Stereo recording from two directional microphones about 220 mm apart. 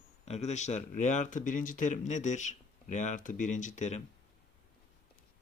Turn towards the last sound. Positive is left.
turn(degrees=30)  # may be behind; listen again after turning